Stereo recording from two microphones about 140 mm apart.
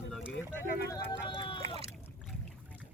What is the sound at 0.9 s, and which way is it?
Speech, 30° left (ahead or behind).